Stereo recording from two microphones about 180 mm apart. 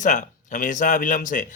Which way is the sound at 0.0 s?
45° left (ahead or behind).